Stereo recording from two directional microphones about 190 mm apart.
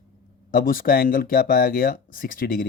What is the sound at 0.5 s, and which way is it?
Speech, 50° left (ahead or behind).